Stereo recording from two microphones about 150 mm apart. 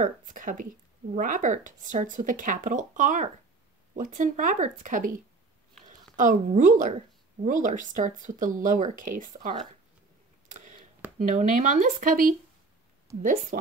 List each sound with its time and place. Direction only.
0.0 s speech: 60° right (ahead or behind)
6.1 s speech: 60° right (ahead or behind)
10.5 s a sound: 60° right (ahead or behind)
11.1 s speech: 55° right (ahead or behind)